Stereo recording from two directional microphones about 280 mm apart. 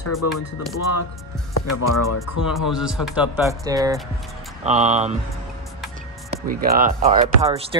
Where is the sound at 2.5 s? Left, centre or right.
Centre.